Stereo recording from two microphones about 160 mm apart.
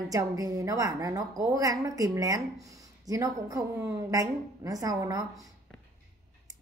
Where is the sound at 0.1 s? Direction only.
20° right (ahead or behind).